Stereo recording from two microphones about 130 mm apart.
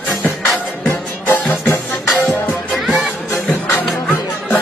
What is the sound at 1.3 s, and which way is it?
Music, 20° left (ahead or behind).